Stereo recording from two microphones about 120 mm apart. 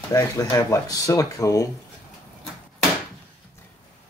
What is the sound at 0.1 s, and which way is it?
Speech, 30° left (ahead or behind).